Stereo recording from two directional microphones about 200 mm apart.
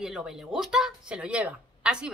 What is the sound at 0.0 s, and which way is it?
A woman's voice, centre (ahead or behind).